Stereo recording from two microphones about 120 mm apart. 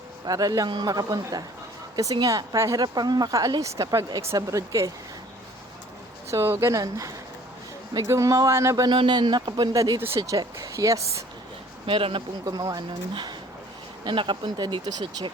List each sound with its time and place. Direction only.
0.3 s a woman's voice: 30° right (ahead or behind)
6.3 s a woman's voice: 25° right (ahead or behind)
11.9 s speech: 45° right (ahead or behind)
12.5 s a woman's voice: 35° right (ahead or behind)